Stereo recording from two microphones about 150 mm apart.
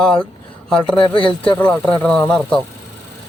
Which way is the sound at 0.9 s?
35° left (ahead or behind).